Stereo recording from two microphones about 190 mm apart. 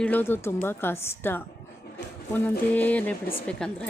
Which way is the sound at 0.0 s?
10° left (ahead or behind).